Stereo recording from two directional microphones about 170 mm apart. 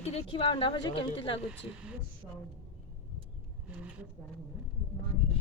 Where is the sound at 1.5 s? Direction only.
5° right (ahead or behind).